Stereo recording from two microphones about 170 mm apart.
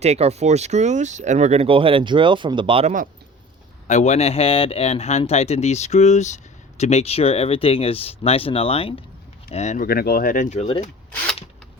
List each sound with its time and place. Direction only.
0.0 s speech: 40° right (ahead or behind)
3.8 s speech: 45° left (ahead or behind)
9.8 s speech: 60° left (ahead or behind); by 10.8 s 40° left (ahead or behind)